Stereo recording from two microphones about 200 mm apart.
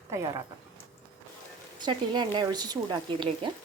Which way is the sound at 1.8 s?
20° right (ahead or behind).